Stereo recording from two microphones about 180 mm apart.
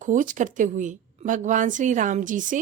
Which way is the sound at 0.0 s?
45° right (ahead or behind).